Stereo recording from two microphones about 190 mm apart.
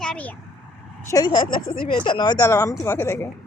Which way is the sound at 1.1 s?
20° left (ahead or behind).